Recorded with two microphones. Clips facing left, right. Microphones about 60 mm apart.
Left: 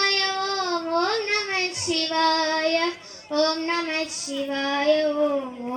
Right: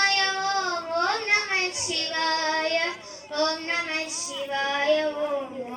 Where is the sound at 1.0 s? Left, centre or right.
Right.